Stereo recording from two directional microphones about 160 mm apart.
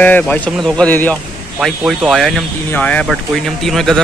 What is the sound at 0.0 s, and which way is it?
Speech, 10° left (ahead or behind).